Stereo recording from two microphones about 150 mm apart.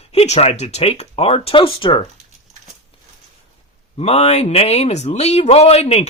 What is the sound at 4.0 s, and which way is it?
Speech, 45° left (ahead or behind).